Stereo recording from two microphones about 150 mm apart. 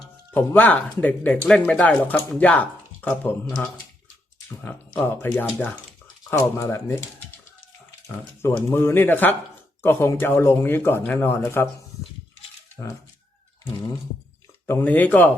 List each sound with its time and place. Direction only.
0.3 s speech: 10° left (ahead or behind)
8.1 s speech: 15° left (ahead or behind)
14.7 s speech: 15° left (ahead or behind)